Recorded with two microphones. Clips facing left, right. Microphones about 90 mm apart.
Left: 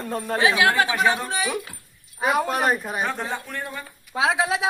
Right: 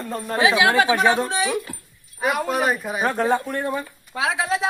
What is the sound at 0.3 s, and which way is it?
Speech, 15° right (ahead or behind).